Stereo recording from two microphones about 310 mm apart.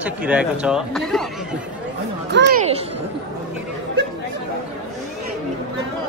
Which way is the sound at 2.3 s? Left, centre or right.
Right.